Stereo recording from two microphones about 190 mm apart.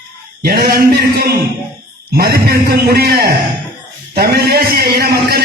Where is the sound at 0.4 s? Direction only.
55° right (ahead or behind).